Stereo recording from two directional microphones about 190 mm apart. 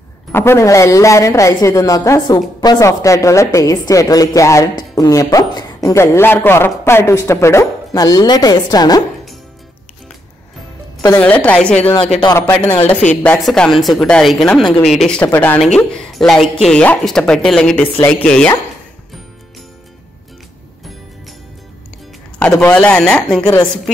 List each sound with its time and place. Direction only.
0.3 s a woman's voice: 15° left (ahead or behind)
11.1 s a woman's voice: 10° left (ahead or behind)
22.6 s speech: 10° left (ahead or behind)
23.4 s a woman's voice: 20° left (ahead or behind)